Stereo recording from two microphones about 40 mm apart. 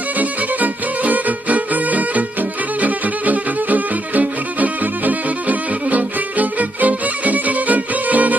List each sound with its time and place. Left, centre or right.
0.2 s music: right